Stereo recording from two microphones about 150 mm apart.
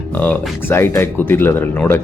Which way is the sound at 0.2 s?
10° left (ahead or behind).